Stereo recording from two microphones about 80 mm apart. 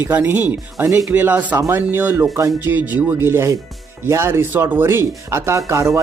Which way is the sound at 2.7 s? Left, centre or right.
Right.